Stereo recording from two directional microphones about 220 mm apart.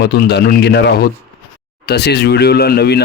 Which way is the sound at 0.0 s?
50° left (ahead or behind).